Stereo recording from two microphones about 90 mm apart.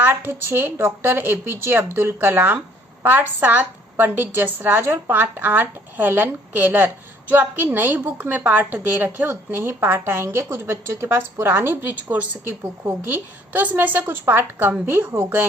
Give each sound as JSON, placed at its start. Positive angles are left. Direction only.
{"t": 0.0, "sound": "a woman's voice", "side_deg": -20}